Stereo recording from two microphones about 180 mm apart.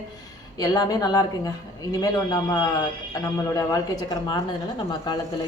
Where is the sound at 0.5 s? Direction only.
20° left (ahead or behind).